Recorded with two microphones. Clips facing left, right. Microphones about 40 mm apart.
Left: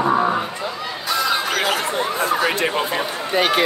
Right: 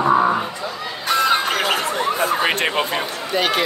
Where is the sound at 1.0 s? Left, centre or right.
Right.